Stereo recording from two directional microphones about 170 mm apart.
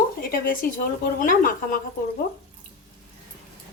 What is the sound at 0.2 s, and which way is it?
A woman's voice, 55° left (ahead or behind).